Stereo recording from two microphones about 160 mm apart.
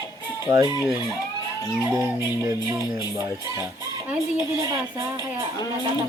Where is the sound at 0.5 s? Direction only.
25° right (ahead or behind).